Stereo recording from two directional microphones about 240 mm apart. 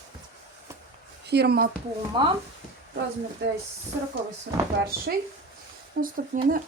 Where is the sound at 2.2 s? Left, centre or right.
Centre.